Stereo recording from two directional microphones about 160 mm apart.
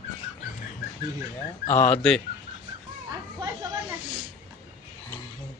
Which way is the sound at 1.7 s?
10° left (ahead or behind).